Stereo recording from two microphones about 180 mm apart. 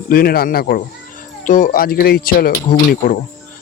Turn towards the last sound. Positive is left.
turn(degrees=50)  # may be behind; listen again after turning